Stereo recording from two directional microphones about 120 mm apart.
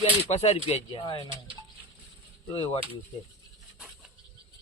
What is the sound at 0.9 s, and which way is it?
Speech, 45° left (ahead or behind).